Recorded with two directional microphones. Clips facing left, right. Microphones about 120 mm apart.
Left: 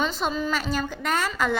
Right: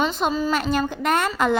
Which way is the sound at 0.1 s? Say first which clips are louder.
Right 4 dB; 50° right (ahead or behind).